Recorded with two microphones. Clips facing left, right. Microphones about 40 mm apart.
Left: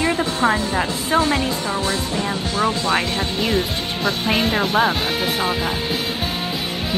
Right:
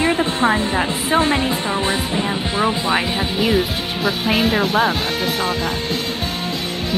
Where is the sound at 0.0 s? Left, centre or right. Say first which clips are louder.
Right 2 dB; centre.